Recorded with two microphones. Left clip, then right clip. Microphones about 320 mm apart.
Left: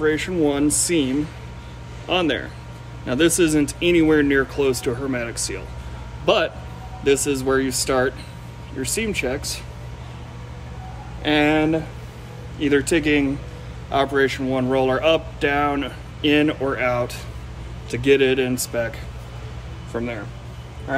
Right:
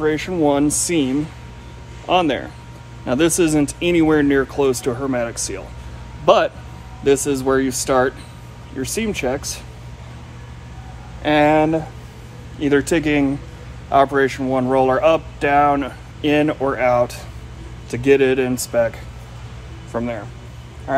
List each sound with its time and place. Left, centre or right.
0.0 s a man's voice: centre
11.2 s speech: centre